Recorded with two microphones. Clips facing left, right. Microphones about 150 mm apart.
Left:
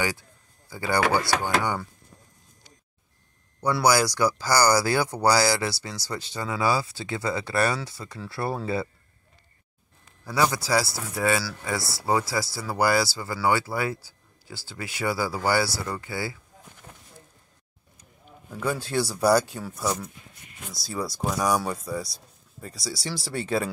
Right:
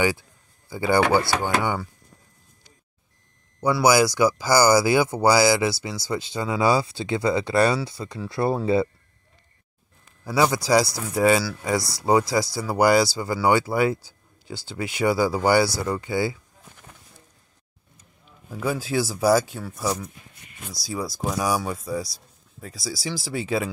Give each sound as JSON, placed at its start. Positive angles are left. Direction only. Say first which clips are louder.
{"t": 0.7, "sound": "speech", "louder": "right 4 dB", "side_deg": -20}
{"t": 3.6, "sound": "speech", "louder": "right 3 dB", "side_deg": -10}
{"t": 10.2, "sound": "speech", "louder": "right 3 dB", "side_deg": -15}
{"t": 18.5, "sound": "speech", "louder": "right 2 dB", "side_deg": -5}